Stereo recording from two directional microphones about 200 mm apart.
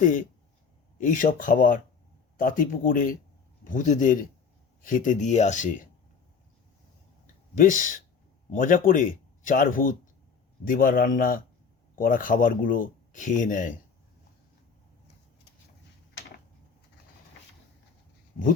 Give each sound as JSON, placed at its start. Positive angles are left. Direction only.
{"t": 0.0, "sound": "speech", "side_deg": 40}
{"t": 7.5, "sound": "speech", "side_deg": 40}